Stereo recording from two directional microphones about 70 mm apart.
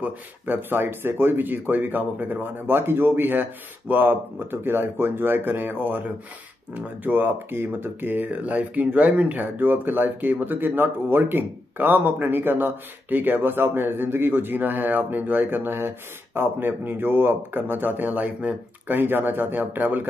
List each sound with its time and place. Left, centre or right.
0.0 s speech: right